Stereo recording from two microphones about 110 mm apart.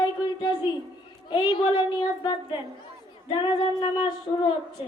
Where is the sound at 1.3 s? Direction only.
45° left (ahead or behind).